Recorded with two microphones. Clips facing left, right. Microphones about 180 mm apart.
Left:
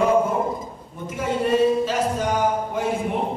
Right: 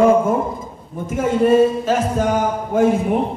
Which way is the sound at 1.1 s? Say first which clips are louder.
Right 7 dB; 45° right (ahead or behind).